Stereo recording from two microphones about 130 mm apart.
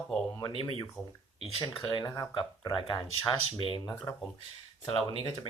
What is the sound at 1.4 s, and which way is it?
Speech, 45° left (ahead or behind).